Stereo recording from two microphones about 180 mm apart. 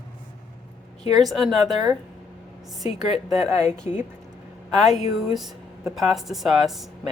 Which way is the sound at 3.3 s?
35° left (ahead or behind).